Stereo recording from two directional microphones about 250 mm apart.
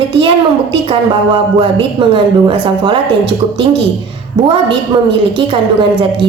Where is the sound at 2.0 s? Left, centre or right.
Centre.